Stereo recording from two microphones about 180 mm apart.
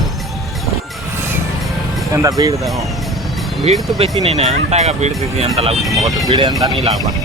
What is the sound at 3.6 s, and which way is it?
Speech, 35° right (ahead or behind).